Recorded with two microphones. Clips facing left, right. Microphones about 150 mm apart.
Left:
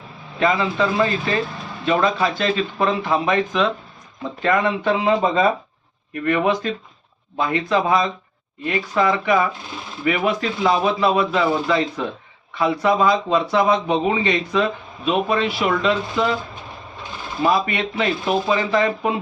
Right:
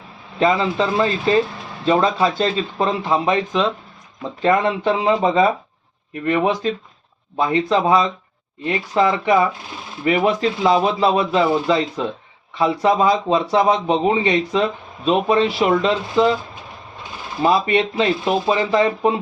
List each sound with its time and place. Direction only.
0.3 s a man's voice: 25° right (ahead or behind)
17.4 s a man's voice: 30° right (ahead or behind)